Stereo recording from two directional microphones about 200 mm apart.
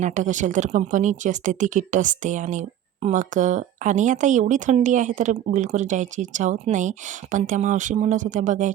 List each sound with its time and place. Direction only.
0.0 s speech: 40° right (ahead or behind)